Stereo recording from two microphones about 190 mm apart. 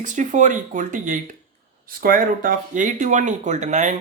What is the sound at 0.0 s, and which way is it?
Speech, 40° right (ahead or behind).